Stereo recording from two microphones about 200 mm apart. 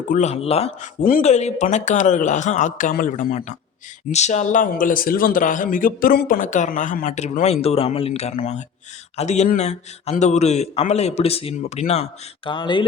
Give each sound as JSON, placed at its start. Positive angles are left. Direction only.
{"t": 0.1, "sound": "speech", "side_deg": 35}